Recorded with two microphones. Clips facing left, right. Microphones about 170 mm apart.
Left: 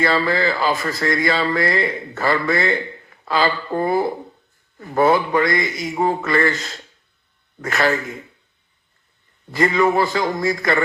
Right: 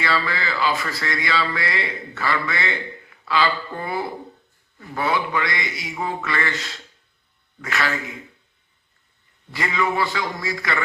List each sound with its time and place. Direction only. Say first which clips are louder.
0.0 s speech: left 6 dB; 45° left (ahead or behind)
9.5 s speech: left 7 dB; 45° left (ahead or behind)